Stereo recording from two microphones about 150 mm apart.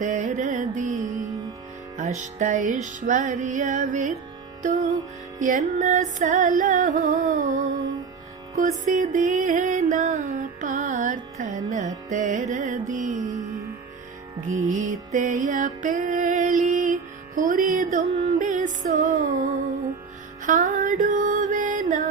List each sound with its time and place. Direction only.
0.0 s music: 55° right (ahead or behind)
14.4 s music: 60° right (ahead or behind)